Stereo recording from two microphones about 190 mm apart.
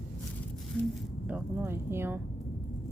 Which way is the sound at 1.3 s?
10° right (ahead or behind).